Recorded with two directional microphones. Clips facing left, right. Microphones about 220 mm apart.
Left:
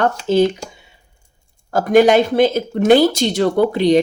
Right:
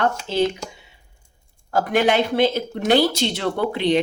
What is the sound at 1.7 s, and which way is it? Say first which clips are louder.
Speech: left 7 dB; 40° left (ahead or behind).